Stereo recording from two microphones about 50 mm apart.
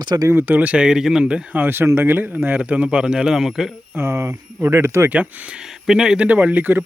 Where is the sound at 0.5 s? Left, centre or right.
Right.